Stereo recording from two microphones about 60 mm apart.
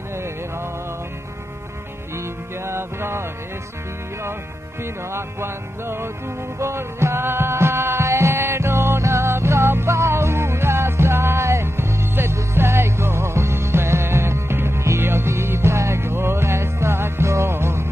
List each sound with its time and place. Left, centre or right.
2.1 s music: right
5.1 s music: right